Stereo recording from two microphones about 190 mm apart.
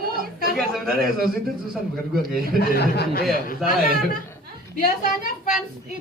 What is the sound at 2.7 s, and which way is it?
Speech, 55° left (ahead or behind).